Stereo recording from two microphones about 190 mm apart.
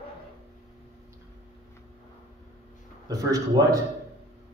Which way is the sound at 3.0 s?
20° right (ahead or behind).